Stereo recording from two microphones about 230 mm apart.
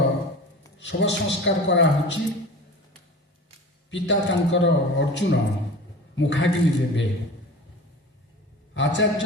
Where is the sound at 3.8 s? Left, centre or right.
Left.